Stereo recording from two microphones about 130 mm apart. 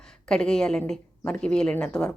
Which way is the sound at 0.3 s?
5° left (ahead or behind).